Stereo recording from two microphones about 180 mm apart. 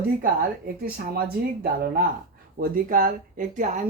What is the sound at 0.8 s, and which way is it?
Speech, 60° right (ahead or behind).